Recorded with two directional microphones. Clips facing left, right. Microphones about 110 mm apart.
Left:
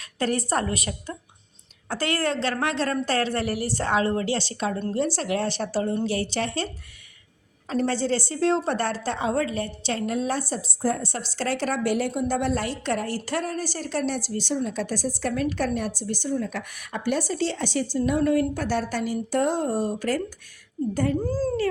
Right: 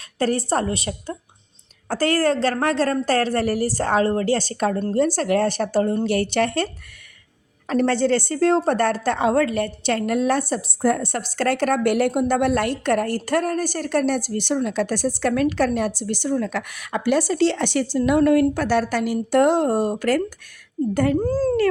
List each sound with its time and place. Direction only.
0.2 s a woman's voice: 35° right (ahead or behind); by 6.7 s 60° right (ahead or behind)
7.7 s a woman's voice: 65° right (ahead or behind)
21.2 s a woman's voice: 50° right (ahead or behind)